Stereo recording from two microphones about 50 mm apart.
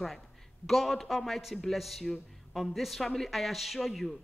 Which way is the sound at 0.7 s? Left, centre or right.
Centre.